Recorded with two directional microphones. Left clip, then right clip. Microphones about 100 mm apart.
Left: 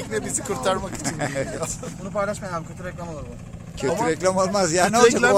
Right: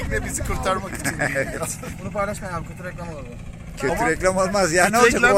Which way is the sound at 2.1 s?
20° right (ahead or behind).